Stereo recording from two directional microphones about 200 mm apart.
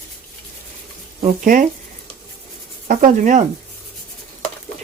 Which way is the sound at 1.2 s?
40° right (ahead or behind).